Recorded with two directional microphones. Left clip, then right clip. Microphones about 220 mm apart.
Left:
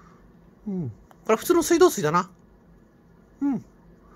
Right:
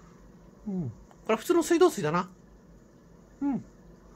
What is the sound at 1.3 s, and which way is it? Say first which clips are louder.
Speech: left 5 dB; 20° left (ahead or behind).